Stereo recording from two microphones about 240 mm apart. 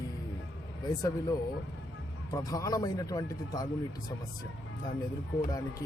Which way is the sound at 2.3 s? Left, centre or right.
Centre.